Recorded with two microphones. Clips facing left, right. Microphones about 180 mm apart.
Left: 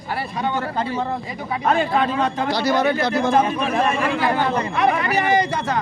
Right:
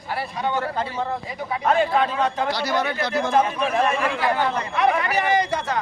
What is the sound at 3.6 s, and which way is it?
Speech, 30° left (ahead or behind).